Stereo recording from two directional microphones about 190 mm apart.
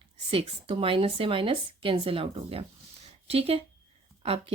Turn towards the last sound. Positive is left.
turn(degrees=-30)  # may be behind; listen again after turning